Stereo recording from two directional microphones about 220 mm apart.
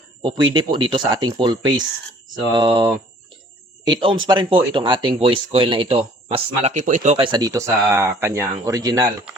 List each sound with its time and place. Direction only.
0.2 s speech: 20° right (ahead or behind)
7.3 s speech: 15° right (ahead or behind)